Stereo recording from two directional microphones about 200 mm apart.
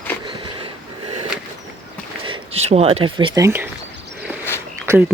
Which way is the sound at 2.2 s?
25° right (ahead or behind).